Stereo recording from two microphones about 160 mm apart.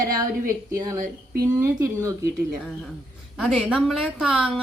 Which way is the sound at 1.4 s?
20° right (ahead or behind).